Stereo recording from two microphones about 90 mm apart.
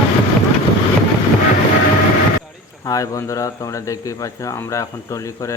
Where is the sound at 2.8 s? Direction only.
40° left (ahead or behind).